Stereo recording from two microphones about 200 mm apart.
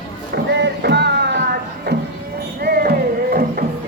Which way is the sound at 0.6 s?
60° right (ahead or behind).